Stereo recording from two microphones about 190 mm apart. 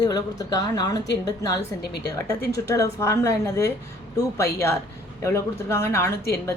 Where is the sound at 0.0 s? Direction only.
20° left (ahead or behind).